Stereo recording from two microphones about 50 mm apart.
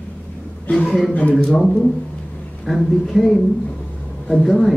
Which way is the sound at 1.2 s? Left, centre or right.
Left.